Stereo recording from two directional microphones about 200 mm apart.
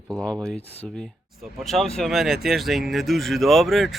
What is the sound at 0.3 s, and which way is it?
Speech, 5° left (ahead or behind).